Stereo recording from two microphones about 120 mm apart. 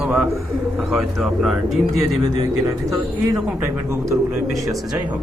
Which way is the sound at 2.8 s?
25° right (ahead or behind).